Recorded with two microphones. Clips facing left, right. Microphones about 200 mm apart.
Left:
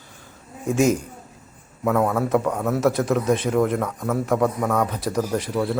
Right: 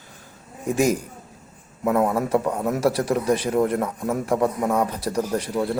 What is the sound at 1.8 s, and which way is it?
Speech, 10° right (ahead or behind).